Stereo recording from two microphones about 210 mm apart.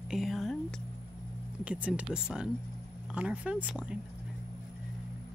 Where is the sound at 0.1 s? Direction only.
Centre (ahead or behind).